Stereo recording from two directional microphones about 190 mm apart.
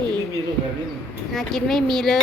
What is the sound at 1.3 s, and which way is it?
Speech, centre (ahead or behind).